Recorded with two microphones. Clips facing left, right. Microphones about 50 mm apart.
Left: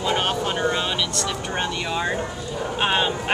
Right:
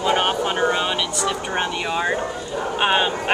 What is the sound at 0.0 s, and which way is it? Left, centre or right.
Vehicle, centre.